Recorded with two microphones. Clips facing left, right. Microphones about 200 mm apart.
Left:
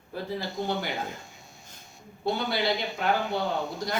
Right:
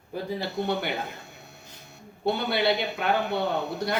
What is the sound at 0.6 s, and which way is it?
Speech, 65° right (ahead or behind).